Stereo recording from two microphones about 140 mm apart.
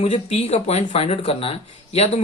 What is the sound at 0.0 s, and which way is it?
Speech, 50° left (ahead or behind).